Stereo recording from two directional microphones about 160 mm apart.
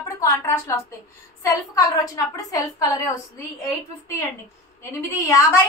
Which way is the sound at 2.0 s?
20° left (ahead or behind).